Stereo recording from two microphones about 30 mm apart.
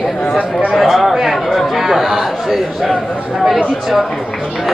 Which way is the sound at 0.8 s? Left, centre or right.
Centre.